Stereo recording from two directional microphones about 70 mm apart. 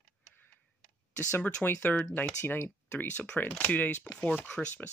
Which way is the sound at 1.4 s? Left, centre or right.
Centre.